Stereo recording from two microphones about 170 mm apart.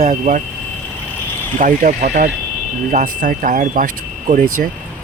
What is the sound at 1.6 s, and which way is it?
Speech, 50° right (ahead or behind).